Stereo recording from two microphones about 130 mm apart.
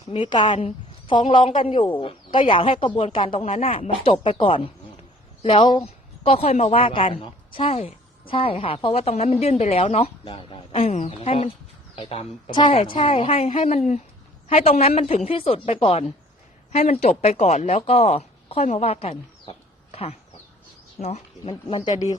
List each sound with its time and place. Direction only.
0.1 s a woman's voice: 40° left (ahead or behind)
13.7 s speech: 65° left (ahead or behind)
14.4 s speech: 50° left (ahead or behind)